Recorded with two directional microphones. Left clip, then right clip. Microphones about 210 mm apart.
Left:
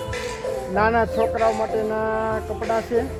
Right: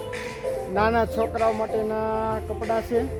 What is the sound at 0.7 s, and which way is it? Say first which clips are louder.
Speech: left 3 dB; 10° right (ahead or behind).